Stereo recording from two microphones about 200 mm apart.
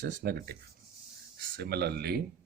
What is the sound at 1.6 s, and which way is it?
Speech, 55° right (ahead or behind).